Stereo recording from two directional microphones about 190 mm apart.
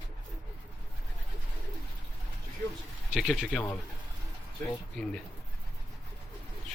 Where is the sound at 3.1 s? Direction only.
Centre (ahead or behind).